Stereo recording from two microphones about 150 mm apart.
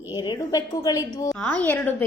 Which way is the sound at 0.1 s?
25° left (ahead or behind).